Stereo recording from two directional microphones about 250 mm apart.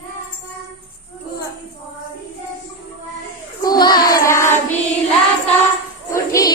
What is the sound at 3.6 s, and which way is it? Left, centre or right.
Child singing, centre.